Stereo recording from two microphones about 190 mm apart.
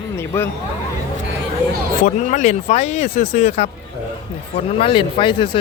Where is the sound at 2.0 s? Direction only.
40° left (ahead or behind).